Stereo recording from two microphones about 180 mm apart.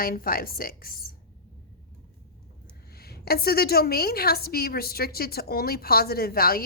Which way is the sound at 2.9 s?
60° left (ahead or behind).